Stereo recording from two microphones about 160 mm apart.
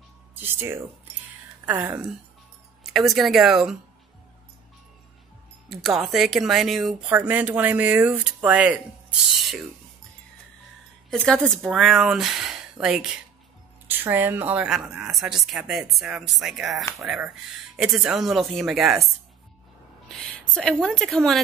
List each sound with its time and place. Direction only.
0.4 s speech: 15° right (ahead or behind)
5.7 s speech: centre (ahead or behind)
7.1 s speech: 10° right (ahead or behind)
11.1 s speech: 5° left (ahead or behind)
20.1 s a woman's voice: 5° left (ahead or behind)